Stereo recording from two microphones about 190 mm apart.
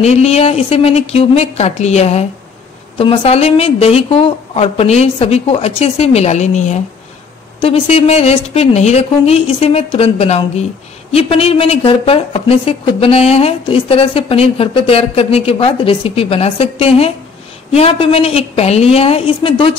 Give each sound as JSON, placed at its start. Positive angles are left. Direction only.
{"t": 0.0, "sound": "speech", "side_deg": 35}